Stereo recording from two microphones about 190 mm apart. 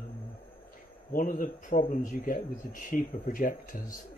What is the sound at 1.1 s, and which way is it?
Speech, 45° left (ahead or behind).